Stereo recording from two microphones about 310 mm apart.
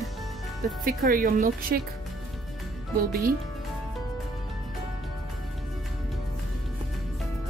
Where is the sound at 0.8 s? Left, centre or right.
Right.